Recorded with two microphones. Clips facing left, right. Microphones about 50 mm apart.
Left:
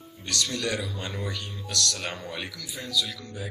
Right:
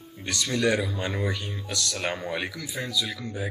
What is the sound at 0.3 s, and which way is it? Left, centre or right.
Speech, right.